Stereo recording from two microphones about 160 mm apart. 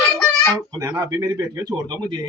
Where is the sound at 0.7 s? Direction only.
15° right (ahead or behind).